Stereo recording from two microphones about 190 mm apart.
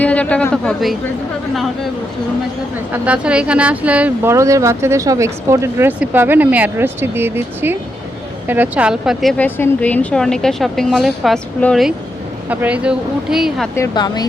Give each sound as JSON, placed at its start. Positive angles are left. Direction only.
{"t": 0.0, "sound": "speech", "side_deg": 5}
{"t": 2.9, "sound": "speech", "side_deg": -5}
{"t": 9.4, "sound": "a woman's voice", "side_deg": 10}
{"t": 13.7, "sound": "a woman's voice", "side_deg": 20}